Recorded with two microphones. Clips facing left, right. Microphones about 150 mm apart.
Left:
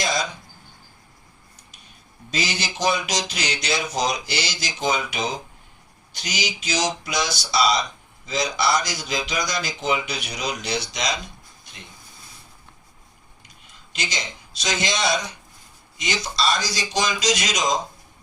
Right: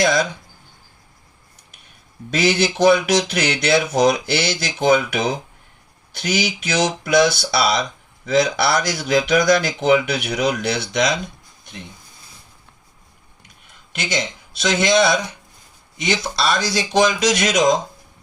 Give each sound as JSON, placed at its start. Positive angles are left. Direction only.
{"t": 0.0, "sound": "speech", "side_deg": -60}
{"t": 2.3, "sound": "speech", "side_deg": -60}
{"t": 13.9, "sound": "speech", "side_deg": -60}